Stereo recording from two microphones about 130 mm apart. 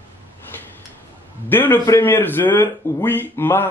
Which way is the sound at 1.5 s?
15° left (ahead or behind).